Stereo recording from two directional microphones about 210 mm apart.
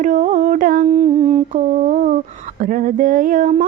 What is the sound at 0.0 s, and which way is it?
Mantra, 35° right (ahead or behind).